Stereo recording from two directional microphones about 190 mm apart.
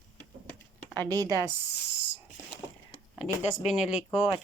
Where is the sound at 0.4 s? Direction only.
10° left (ahead or behind).